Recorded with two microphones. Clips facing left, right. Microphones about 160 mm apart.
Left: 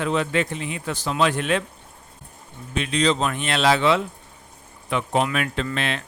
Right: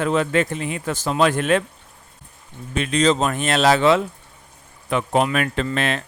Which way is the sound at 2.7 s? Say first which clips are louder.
Right 3 dB; 45° right (ahead or behind).